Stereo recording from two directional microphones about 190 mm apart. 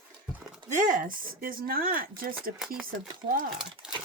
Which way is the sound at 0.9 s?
45° right (ahead or behind).